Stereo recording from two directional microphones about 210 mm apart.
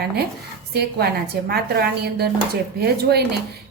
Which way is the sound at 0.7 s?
50° right (ahead or behind).